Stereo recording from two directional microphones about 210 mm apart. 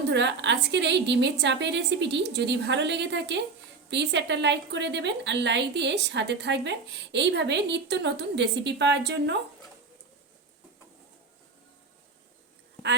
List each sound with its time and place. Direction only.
0.1 s a woman's voice: 55° right (ahead or behind)